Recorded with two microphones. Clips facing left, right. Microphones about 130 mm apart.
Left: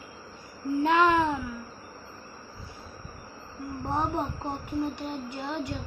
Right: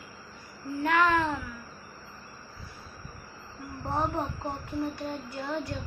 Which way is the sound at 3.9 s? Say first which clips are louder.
Left 1 dB; 15° left (ahead or behind).